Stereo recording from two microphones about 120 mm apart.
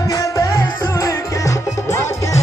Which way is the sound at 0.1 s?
25° left (ahead or behind).